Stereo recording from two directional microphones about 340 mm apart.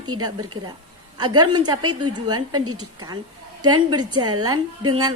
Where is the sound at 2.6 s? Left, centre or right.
Right.